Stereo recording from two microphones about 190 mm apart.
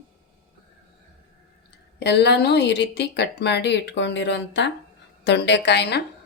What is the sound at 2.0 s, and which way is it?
A woman's voice, 60° left (ahead or behind).